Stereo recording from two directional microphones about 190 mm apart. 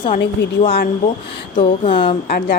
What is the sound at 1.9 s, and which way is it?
Speech, 25° left (ahead or behind).